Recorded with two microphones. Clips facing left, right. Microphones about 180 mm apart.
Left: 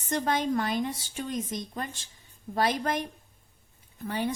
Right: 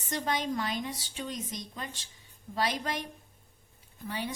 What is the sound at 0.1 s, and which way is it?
A woman's voice, 50° left (ahead or behind).